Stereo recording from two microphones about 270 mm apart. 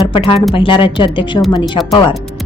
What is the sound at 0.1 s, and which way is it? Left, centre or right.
A woman's voice, centre.